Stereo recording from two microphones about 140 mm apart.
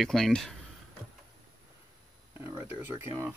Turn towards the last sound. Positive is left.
turn(degrees=-15)  # may be behind; listen again after turning